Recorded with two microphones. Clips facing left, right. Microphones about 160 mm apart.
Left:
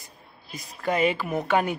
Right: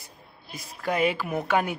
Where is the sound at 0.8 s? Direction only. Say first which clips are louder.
Left 1 dB; 5° right (ahead or behind).